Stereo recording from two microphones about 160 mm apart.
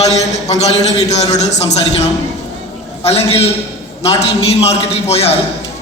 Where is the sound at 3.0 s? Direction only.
40° left (ahead or behind).